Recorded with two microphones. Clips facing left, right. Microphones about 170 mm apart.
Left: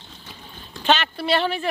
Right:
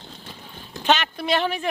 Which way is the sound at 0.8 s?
15° right (ahead or behind).